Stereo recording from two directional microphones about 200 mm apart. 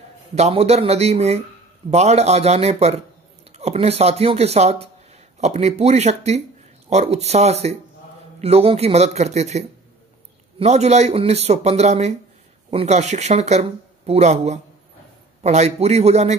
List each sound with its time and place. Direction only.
0.4 s speech: 30° right (ahead or behind)